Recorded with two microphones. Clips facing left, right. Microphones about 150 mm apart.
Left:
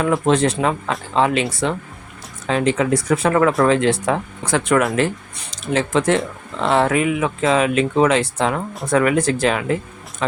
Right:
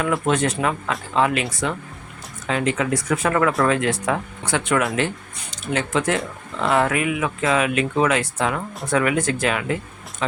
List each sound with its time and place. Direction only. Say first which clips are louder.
0.0 s speech: left 4 dB; 30° left (ahead or behind)
5.7 s speech: left 4 dB; 30° left (ahead or behind)